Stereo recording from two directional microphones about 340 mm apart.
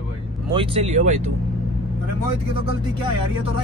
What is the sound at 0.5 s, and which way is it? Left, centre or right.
Speech, centre.